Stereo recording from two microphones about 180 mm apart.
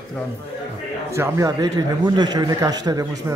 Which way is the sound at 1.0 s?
15° right (ahead or behind).